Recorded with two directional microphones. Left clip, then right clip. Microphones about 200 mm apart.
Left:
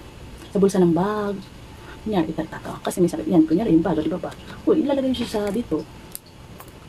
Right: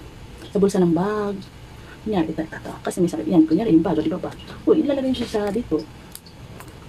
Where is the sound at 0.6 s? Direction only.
5° left (ahead or behind).